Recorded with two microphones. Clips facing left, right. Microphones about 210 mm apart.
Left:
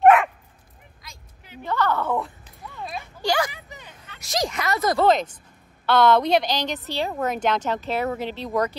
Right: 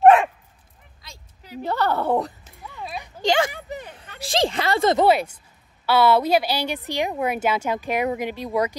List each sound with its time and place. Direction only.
0.0 s dog: 30° right (ahead or behind)
1.0 s a woman's voice: 35° right (ahead or behind)
3.0 s a sound: 20° right (ahead or behind)
3.5 s speech: 50° right (ahead or behind)
4.2 s a woman's voice: 30° right (ahead or behind)
5.0 s a woman's voice: 10° right (ahead or behind)